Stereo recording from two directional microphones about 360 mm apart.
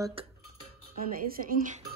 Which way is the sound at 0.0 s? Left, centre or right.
Centre.